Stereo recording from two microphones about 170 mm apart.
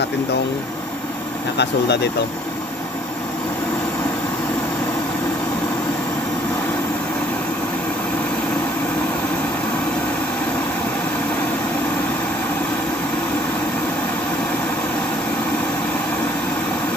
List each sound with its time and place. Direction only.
1.5 s speech: 80° left